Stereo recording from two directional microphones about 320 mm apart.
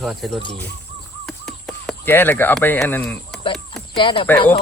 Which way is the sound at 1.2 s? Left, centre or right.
Centre.